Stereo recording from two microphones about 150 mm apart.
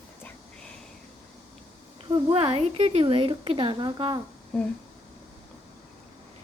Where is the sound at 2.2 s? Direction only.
40° right (ahead or behind).